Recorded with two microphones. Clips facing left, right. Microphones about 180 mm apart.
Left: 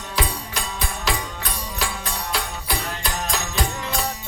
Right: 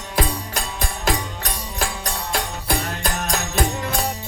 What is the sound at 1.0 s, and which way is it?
Music, 50° right (ahead or behind).